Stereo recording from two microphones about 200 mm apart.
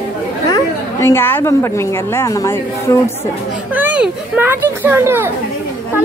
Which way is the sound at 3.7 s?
10° right (ahead or behind).